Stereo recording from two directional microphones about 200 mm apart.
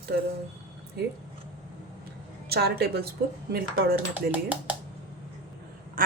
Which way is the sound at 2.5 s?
50° right (ahead or behind).